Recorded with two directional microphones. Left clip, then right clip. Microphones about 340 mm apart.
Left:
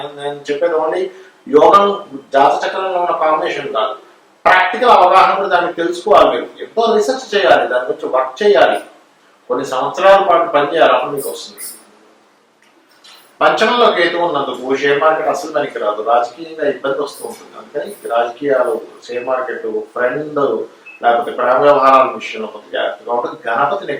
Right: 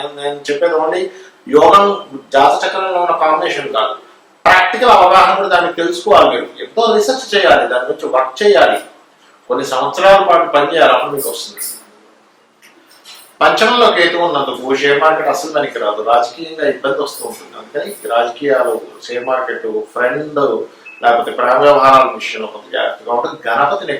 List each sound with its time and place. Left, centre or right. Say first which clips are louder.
0.0 s speech: right 3 dB; centre
1.5 s a man's voice: right 1 dB; left; by 3.8 s centre
4.5 s a sound: right 2 dB; centre
5.0 s speech: right 1 dB; centre
9.9 s speech: right 1 dB; centre
13.4 s speech: right 2 dB; centre; by 14.7 s left
14.7 s speech: right 2 dB; centre
15.9 s a man's voice: right 1 dB; left
16.6 s speech: right 2 dB; centre
16.9 s a man's voice: right 2 dB; centre
20.4 s a man's voice: right 1 dB; centre
21.0 s speech: right 2 dB; centre
23.0 s speech: right 2 dB; centre